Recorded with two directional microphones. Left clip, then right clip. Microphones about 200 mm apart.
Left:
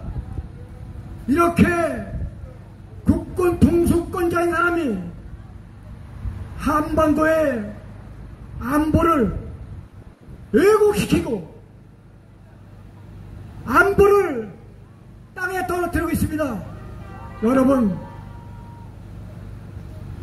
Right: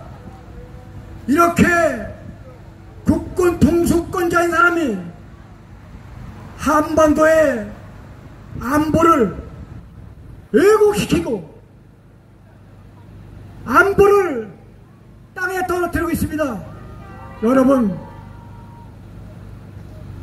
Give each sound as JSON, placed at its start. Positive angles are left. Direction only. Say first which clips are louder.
{"t": 1.2, "sound": "a man's voice", "louder": "right 4 dB", "side_deg": -35}
{"t": 3.1, "sound": "music", "louder": "right 3 dB", "side_deg": -35}
{"t": 6.6, "sound": "a man's voice", "louder": "right 5 dB", "side_deg": -35}
{"t": 8.5, "sound": "a man's voice", "louder": "right 3 dB", "side_deg": -35}
{"t": 10.5, "sound": "a man's voice", "louder": "right 3 dB", "side_deg": -35}
{"t": 13.7, "sound": "a man's voice", "louder": "right 3 dB", "side_deg": -35}